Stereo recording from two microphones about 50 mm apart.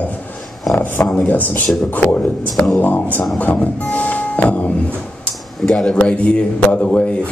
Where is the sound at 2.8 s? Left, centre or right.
Left.